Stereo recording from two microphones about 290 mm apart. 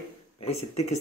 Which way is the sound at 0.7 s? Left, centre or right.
Left.